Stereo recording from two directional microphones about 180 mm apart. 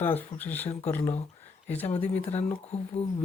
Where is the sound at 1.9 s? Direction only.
35° left (ahead or behind).